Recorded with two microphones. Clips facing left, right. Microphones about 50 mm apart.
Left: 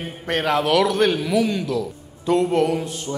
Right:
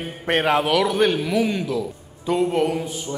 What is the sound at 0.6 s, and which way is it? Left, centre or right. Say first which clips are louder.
A man's voice: left 1 dB; centre.